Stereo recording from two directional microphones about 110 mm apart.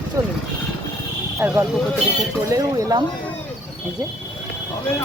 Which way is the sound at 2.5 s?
30° right (ahead or behind).